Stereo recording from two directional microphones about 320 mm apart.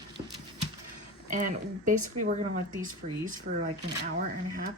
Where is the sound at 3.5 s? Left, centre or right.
Right.